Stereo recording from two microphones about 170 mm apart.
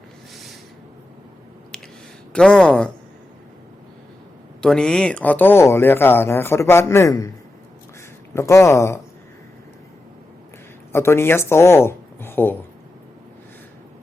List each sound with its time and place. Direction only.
2.3 s speech: 5° left (ahead or behind)
4.6 s speech: 5° left (ahead or behind)
8.4 s speech: 15° left (ahead or behind)
10.9 s speech: 15° left (ahead or behind)